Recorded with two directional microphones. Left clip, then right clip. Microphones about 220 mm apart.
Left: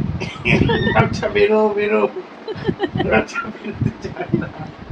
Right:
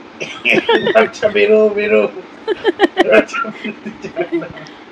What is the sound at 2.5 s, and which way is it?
Speech, 25° right (ahead or behind).